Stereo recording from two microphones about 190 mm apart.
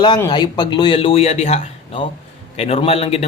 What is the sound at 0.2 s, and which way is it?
Speech, 20° left (ahead or behind).